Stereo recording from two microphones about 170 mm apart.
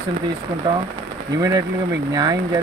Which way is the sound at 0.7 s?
30° right (ahead or behind).